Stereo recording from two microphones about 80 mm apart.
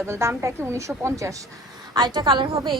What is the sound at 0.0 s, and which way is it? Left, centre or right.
A woman's voice, right.